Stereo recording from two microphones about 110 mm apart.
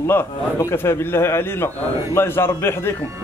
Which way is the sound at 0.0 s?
25° left (ahead or behind).